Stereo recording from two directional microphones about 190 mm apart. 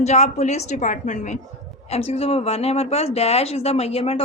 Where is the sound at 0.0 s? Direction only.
35° left (ahead or behind).